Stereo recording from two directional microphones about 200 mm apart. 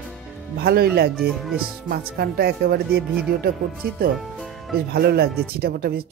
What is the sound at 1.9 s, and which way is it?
Speech, 50° right (ahead or behind).